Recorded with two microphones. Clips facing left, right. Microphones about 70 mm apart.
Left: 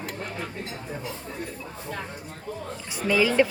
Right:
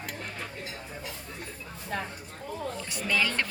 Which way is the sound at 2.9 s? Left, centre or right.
Centre.